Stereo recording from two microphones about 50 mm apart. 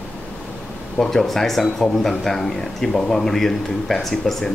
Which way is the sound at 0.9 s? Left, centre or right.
Centre.